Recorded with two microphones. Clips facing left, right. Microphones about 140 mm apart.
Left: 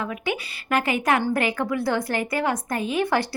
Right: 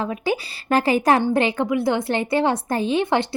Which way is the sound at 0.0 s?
30° right (ahead or behind).